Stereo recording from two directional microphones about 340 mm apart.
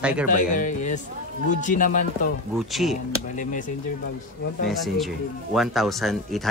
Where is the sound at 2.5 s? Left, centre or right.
Centre.